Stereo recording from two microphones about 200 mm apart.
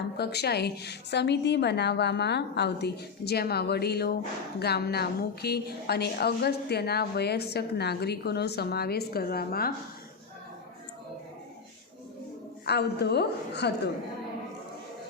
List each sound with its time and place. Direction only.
0.2 s a woman's voice: 55° left (ahead or behind)
12.6 s a woman's voice: 55° left (ahead or behind)